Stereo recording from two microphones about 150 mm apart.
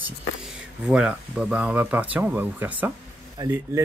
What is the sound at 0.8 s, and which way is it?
Speech, 5° right (ahead or behind).